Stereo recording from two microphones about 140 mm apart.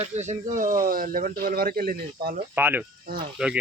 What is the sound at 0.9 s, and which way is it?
Speech, 90° right.